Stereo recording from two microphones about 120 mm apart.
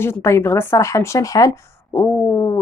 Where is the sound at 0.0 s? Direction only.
20° left (ahead or behind).